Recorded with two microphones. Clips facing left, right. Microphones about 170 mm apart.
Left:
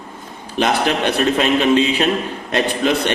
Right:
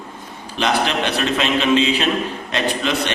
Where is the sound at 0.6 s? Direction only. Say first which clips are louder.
Left 2 dB; 50° left (ahead or behind).